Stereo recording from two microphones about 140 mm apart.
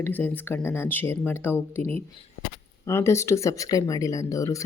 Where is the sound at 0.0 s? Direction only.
15° left (ahead or behind).